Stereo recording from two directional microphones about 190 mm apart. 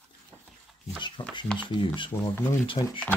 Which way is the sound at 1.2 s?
25° left (ahead or behind).